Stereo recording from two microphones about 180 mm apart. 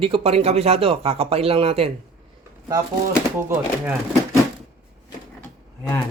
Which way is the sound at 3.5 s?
10° right (ahead or behind).